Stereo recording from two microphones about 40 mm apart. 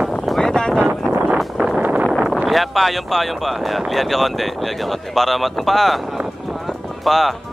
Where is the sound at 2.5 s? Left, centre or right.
Centre.